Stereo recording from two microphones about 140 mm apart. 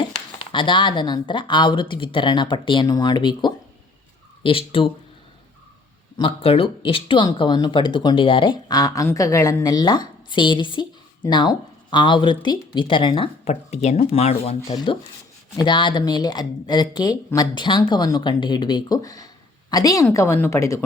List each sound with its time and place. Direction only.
0.5 s a woman's voice: 35° left (ahead or behind)
6.1 s a woman's voice: 40° left (ahead or behind)
13.5 s speech: 50° left (ahead or behind)
15.5 s a woman's voice: 35° left (ahead or behind)